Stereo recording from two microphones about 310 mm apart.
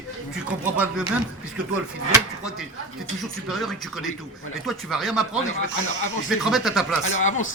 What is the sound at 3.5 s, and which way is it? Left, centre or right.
Speech, centre.